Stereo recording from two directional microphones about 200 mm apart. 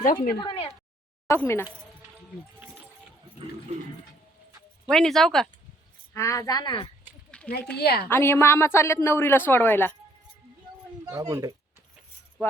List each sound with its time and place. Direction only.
0.0 s speech: 40° left (ahead or behind)
0.3 s speech: 25° left (ahead or behind)
1.3 s a woman's voice: 10° left (ahead or behind)
4.9 s speech: centre (ahead or behind)
6.1 s speech: 15° left (ahead or behind)
7.3 s a sound: 5° left (ahead or behind)
7.8 s a woman's voice: 55° left (ahead or behind)
8.1 s a woman's voice: 10° left (ahead or behind)
11.0 s speech: 15° right (ahead or behind)